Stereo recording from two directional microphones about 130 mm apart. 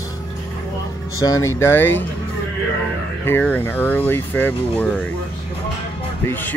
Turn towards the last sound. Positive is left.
turn(degrees=15)  # may be behind; listen again after turning